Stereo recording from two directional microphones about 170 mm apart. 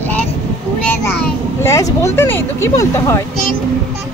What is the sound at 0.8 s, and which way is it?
A child's voice, 10° left (ahead or behind).